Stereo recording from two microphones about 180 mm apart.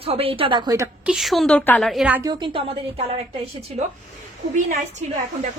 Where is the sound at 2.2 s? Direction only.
25° right (ahead or behind).